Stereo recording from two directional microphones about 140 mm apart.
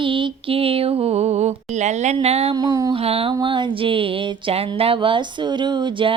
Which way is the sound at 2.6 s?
25° right (ahead or behind).